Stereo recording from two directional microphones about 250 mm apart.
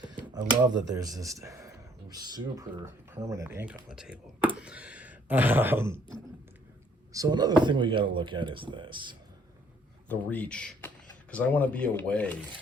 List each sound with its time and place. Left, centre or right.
0.0 s a sound: centre
0.9 s speech: centre
7.1 s speech: centre
10.1 s speech: centre